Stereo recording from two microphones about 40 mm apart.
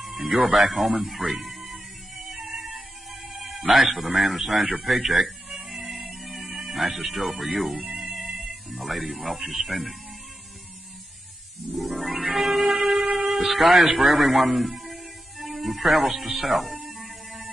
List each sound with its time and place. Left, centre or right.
0.0 s music: centre
3.1 s a man's voice: centre
5.7 s music: centre
6.7 s speech: centre
7.9 s music: centre
8.6 s speech: centre
11.9 s speech: centre
12.8 s train: centre
13.3 s speech: centre
14.8 s music: centre
16.8 s a sound: centre